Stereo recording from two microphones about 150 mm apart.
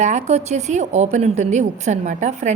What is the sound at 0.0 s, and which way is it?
A woman's voice, 50° right (ahead or behind).